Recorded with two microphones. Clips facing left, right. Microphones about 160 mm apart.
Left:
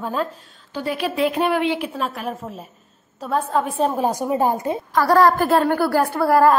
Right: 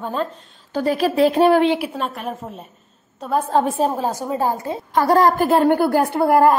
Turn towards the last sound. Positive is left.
turn(degrees=-20)  # may be behind; listen again after turning